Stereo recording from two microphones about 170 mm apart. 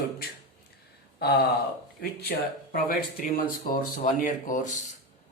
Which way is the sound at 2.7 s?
55° left (ahead or behind).